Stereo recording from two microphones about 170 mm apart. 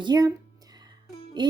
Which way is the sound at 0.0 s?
20° right (ahead or behind).